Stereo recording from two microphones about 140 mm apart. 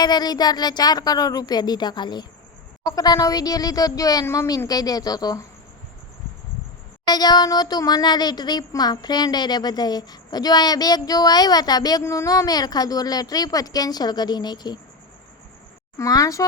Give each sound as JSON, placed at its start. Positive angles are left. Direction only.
{"t": 0.0, "sound": "speech", "side_deg": 30}
{"t": 7.1, "sound": "speech", "side_deg": 30}
{"t": 16.0, "sound": "speech", "side_deg": 25}